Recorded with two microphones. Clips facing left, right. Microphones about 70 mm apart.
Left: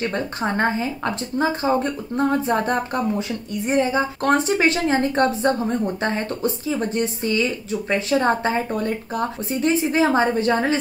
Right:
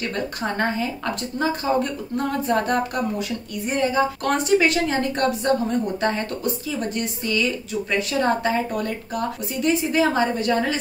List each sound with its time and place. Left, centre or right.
0.0 s a woman's voice: left